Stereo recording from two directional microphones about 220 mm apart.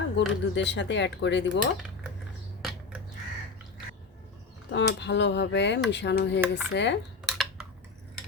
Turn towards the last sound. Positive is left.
turn(degrees=0)  # may be behind; listen again after turning